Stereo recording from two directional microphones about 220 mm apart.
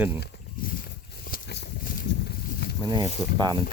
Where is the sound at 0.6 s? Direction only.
40° left (ahead or behind).